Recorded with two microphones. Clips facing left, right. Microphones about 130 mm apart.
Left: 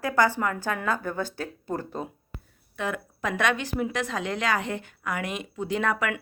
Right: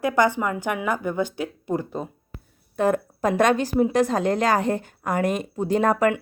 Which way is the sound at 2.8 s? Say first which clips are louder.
Right 9 dB; 40° right (ahead or behind).